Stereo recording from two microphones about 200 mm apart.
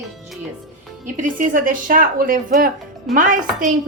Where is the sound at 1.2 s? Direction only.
40° right (ahead or behind).